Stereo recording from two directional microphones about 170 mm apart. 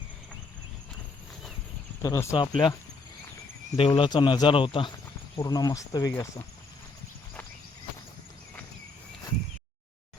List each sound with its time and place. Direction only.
2.0 s speech: 15° left (ahead or behind)
3.8 s speech: 30° left (ahead or behind)